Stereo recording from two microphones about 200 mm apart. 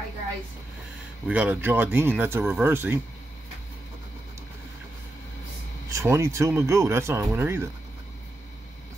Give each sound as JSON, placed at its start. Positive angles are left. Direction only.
{"t": 1.2, "sound": "speech", "side_deg": -5}
{"t": 5.9, "sound": "speech", "side_deg": -15}